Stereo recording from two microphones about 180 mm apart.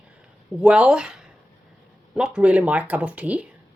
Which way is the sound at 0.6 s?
5° right (ahead or behind).